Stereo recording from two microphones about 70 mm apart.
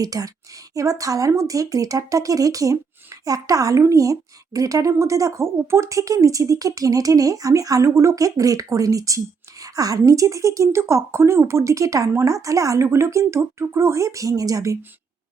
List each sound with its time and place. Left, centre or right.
0.0 s speech: right